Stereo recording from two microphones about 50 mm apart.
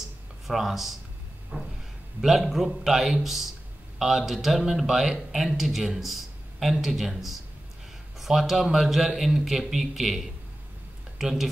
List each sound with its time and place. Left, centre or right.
0.5 s speech: centre
1.5 s a sound: centre
2.2 s speech: centre